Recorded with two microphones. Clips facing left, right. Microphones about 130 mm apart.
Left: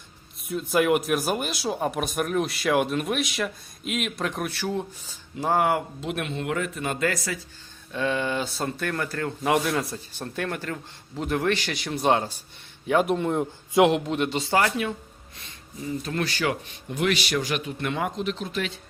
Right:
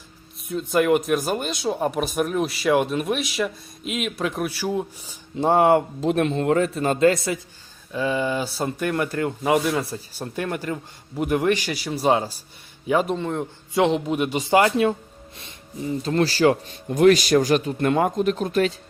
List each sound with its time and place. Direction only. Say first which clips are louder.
0.4 s speech: right 2 dB; centre (ahead or behind)
5.4 s speech: right 6 dB; 30° right (ahead or behind)
7.9 s a man's voice: right 3 dB; 5° right (ahead or behind)
9.4 s a man's voice: right 2 dB; centre (ahead or behind)
13.8 s a man's voice: right 3 dB; centre (ahead or behind); by 18.8 s 45° right (ahead or behind)